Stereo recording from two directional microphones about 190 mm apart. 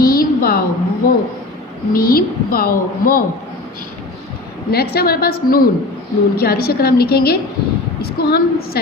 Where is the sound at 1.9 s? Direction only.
50° left (ahead or behind).